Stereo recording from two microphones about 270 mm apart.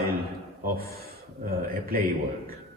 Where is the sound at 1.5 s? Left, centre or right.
Right.